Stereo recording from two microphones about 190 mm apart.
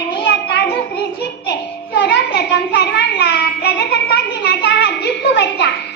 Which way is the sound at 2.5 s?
60° left (ahead or behind).